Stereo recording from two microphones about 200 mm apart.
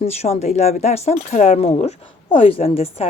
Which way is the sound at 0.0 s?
30° left (ahead or behind).